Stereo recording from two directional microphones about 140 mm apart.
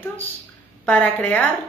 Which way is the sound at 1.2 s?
10° left (ahead or behind).